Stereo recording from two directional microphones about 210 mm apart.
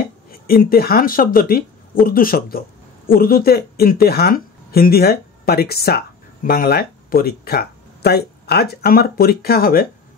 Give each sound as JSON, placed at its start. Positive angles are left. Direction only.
{"t": 0.3, "sound": "speech", "side_deg": 45}